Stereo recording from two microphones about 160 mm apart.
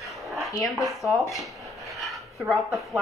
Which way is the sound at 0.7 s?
Centre (ahead or behind).